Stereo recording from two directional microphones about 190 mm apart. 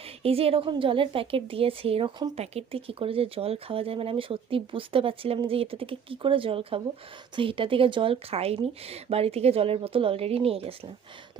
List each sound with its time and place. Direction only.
0.2 s a woman's voice: 30° right (ahead or behind)